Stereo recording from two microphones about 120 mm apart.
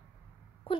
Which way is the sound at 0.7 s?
50° left (ahead or behind).